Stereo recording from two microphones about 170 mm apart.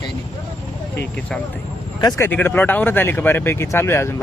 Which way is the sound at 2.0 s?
25° left (ahead or behind).